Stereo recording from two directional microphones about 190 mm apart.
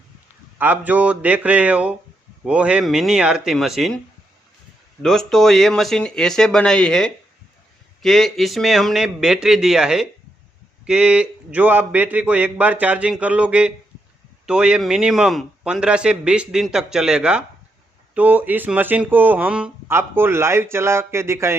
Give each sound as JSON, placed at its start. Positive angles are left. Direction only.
{"t": 0.6, "sound": "a man's voice", "side_deg": -10}
{"t": 5.0, "sound": "a man's voice", "side_deg": 0}